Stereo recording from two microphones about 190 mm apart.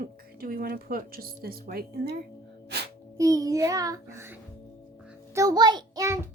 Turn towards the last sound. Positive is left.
turn(degrees=-15)  # may be behind; listen again after turning